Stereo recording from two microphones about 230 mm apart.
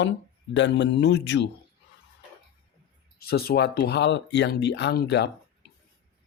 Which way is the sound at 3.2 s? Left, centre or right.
Left.